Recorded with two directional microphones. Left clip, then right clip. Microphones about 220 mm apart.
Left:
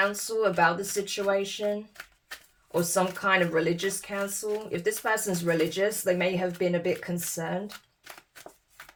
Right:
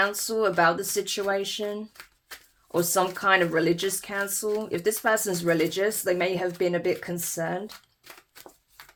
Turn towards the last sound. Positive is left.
turn(degrees=-40)  # may be behind; listen again after turning